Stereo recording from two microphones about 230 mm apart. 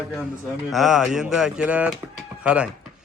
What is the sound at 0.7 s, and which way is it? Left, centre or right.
Speech, centre.